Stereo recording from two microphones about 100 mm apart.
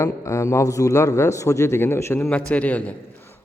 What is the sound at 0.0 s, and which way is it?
A man's voice, 30° left (ahead or behind).